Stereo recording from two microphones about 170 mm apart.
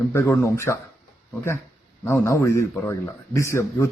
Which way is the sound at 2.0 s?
15° left (ahead or behind).